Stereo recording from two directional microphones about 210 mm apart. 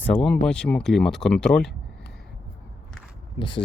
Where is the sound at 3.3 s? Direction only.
20° left (ahead or behind).